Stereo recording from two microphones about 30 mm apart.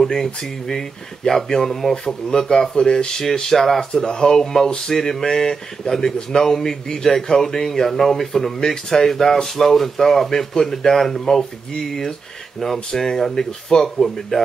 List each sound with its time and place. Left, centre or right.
0.1 s speech: centre
2.2 s speech: left
3.9 s speech: left